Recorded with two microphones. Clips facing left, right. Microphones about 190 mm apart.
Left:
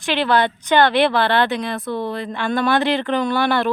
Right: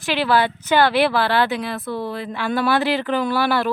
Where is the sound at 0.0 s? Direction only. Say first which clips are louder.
Left 1 dB; 5° right (ahead or behind).